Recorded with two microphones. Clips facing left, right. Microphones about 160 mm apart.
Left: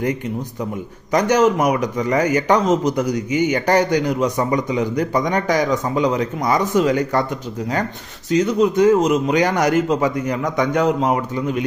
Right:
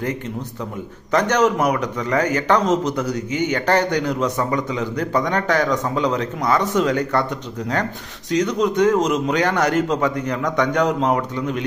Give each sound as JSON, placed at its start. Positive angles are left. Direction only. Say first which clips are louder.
{"t": 1.1, "sound": "a man's voice", "louder": "left 2 dB", "side_deg": 10}
{"t": 8.3, "sound": "a man's voice", "louder": "left 3 dB", "side_deg": 5}